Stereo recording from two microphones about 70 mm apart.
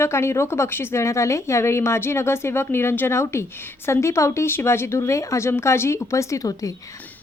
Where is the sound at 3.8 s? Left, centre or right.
Left.